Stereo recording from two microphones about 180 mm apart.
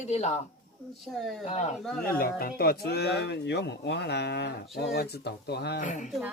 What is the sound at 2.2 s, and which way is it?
Speech, 55° left (ahead or behind).